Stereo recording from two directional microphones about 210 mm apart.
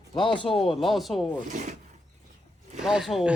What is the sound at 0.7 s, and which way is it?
Speech, centre (ahead or behind).